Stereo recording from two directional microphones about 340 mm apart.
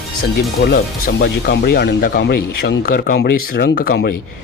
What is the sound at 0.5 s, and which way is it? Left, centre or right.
Speech, left.